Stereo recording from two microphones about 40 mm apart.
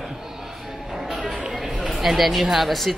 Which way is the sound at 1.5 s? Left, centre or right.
Centre.